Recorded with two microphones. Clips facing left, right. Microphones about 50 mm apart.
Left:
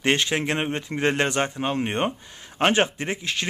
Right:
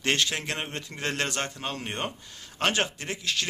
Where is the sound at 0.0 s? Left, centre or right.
Left.